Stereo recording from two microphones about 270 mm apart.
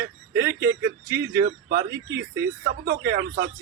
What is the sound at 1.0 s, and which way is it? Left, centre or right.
Speech, centre.